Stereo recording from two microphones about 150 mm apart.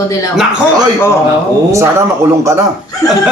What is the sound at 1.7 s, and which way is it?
Speech, 20° right (ahead or behind).